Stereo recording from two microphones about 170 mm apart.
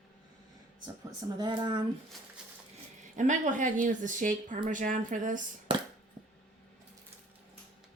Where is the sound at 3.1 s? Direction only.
50° right (ahead or behind).